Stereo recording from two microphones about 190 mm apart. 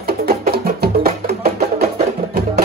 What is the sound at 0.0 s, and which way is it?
Music, 55° right (ahead or behind).